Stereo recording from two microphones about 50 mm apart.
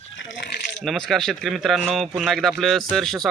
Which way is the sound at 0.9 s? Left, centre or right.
Centre.